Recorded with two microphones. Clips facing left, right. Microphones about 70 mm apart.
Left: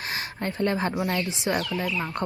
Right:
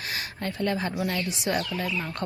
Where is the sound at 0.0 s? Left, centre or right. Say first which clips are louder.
Left 2 dB; left.